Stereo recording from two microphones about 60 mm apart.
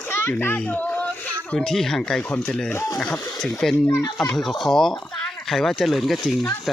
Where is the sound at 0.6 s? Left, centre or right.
Left.